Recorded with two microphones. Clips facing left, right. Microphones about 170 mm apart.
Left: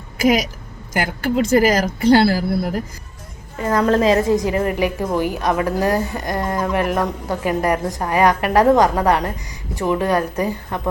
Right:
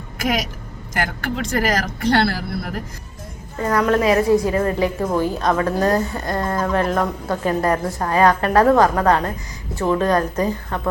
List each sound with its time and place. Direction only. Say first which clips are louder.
0.2 s speech: left 6 dB; centre (ahead or behind)
3.6 s a woman's voice: left 1 dB; 30° left (ahead or behind); by 10.8 s 10° left (ahead or behind)